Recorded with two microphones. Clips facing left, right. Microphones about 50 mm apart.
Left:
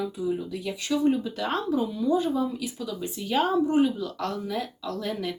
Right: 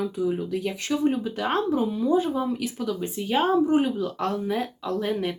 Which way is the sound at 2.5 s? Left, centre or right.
Right.